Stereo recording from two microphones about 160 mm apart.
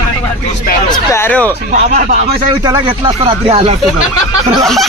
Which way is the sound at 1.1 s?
10° left (ahead or behind).